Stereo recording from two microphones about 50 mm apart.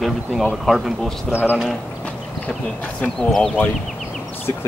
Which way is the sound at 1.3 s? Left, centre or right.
Right.